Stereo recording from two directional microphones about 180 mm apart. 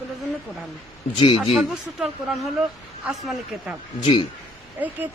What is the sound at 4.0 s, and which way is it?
Speech, 25° left (ahead or behind).